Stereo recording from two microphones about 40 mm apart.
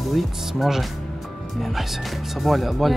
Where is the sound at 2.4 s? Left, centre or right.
Centre.